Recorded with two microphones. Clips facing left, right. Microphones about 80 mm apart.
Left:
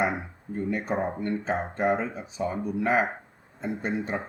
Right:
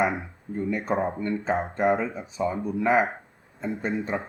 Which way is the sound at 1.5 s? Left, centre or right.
Right.